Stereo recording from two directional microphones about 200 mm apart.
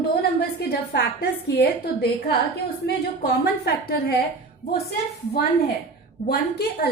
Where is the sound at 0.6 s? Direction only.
55° left (ahead or behind).